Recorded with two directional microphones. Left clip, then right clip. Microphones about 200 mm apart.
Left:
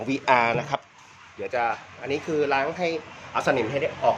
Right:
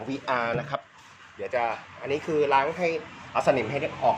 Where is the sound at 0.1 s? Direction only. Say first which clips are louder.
Left 6 dB; 45° left (ahead or behind).